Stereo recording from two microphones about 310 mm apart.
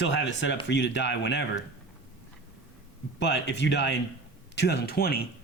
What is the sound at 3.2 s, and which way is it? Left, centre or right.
Speech, left.